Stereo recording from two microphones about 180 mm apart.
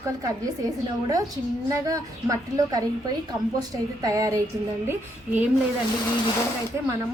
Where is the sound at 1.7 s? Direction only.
15° right (ahead or behind).